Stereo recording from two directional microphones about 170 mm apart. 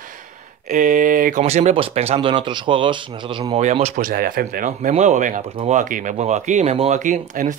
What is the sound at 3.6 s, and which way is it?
Speech, 40° right (ahead or behind).